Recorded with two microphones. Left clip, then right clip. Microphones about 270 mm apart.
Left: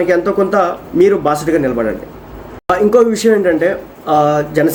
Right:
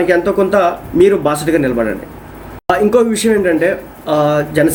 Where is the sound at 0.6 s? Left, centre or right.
Centre.